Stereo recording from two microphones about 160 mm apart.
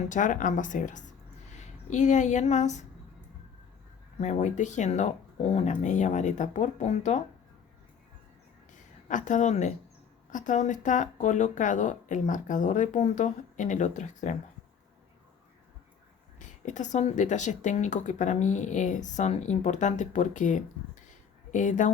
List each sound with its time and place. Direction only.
0.1 s speech: 50° left (ahead or behind)
4.2 s speech: 45° left (ahead or behind)
8.7 s a sound: 50° left (ahead or behind)
10.3 s speech: 50° left (ahead or behind)
16.4 s speech: 50° left (ahead or behind)